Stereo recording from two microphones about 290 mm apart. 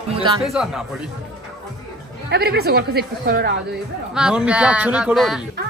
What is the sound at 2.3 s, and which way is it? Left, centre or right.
Music, right.